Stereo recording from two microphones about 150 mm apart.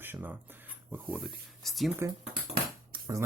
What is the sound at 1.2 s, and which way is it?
Speech, centre (ahead or behind).